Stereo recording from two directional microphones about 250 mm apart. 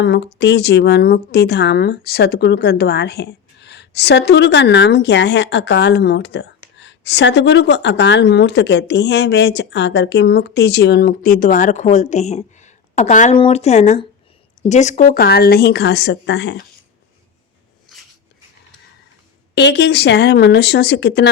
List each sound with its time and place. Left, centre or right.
0.0 s a woman's voice: left
19.5 s a woman's voice: left